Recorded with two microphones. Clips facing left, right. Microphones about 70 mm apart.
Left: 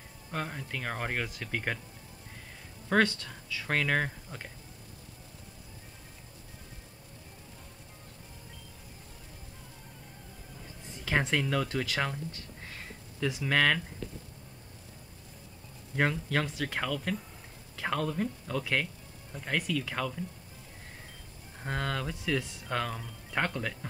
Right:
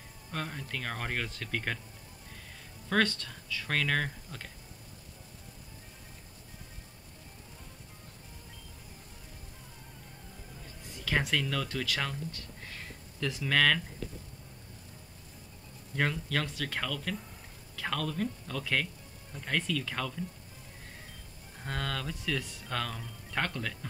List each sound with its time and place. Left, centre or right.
0.3 s speech: centre
2.9 s speech: centre
11.1 s speech: centre
16.0 s speech: centre
21.5 s speech: centre